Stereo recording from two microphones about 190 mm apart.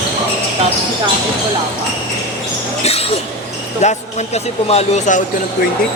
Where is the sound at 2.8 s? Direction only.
30° left (ahead or behind).